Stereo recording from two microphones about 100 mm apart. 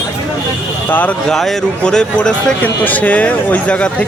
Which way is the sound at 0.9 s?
15° left (ahead or behind).